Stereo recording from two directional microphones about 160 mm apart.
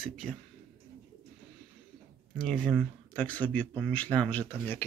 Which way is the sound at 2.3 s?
5° left (ahead or behind).